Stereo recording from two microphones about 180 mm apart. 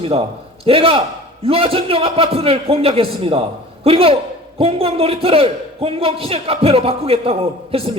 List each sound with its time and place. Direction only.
0.0 s a man's voice: 30° right (ahead or behind)